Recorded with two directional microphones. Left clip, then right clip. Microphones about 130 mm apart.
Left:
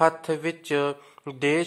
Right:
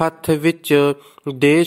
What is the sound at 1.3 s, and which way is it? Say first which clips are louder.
Speech: right 9 dB; 45° right (ahead or behind).